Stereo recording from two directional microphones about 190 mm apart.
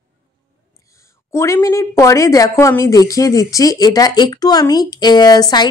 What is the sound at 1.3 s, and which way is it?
A woman's voice, 15° left (ahead or behind).